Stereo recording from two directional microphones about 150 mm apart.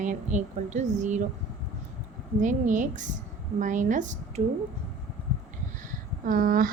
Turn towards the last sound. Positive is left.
turn(degrees=-65)  # may be behind; listen again after turning